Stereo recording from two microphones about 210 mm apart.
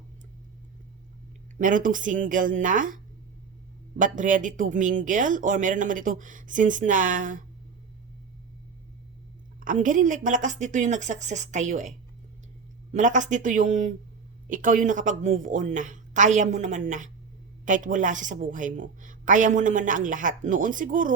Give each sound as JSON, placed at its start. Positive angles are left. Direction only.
{"t": 1.5, "sound": "speech", "side_deg": -40}
{"t": 9.6, "sound": "speech", "side_deg": -40}